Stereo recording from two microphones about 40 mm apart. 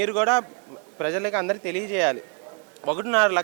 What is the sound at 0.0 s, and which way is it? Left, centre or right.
Speech, centre.